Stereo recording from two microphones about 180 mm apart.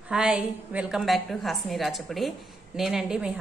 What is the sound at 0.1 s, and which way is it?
A woman's voice, 5° right (ahead or behind).